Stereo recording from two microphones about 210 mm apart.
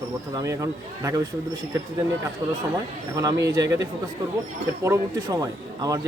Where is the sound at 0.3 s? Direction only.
15° right (ahead or behind).